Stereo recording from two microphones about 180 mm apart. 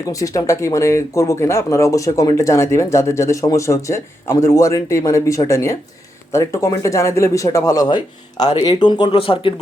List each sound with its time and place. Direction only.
0.0 s speech: 20° left (ahead or behind)